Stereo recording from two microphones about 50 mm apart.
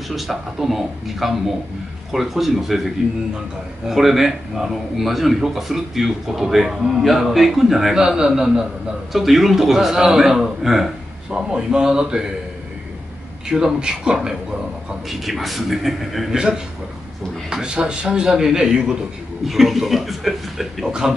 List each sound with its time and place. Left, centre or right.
0.1 s speech: centre
3.9 s speech: centre
7.9 s a man's voice: centre
9.1 s speech: centre
11.3 s a man's voice: centre
13.5 s a man's voice: centre
16.3 s a man's voice: centre
20.8 s a man's voice: centre